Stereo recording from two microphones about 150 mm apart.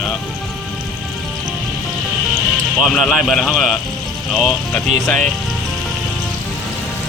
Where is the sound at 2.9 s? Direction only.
Centre (ahead or behind).